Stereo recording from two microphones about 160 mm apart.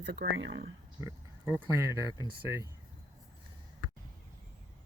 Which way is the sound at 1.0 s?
15° right (ahead or behind).